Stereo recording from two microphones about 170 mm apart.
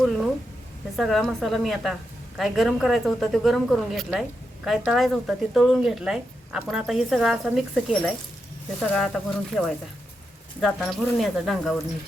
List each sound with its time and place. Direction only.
0.9 s speech: centre (ahead or behind)